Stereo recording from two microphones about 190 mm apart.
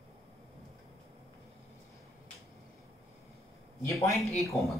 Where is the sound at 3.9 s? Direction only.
15° left (ahead or behind).